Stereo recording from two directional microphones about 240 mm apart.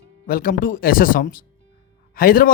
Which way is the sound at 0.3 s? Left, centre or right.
Left.